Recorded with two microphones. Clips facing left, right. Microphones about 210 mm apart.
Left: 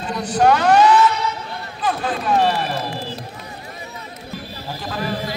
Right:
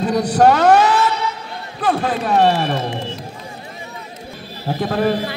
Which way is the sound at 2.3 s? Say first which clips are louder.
Right 4 dB; 60° right (ahead or behind).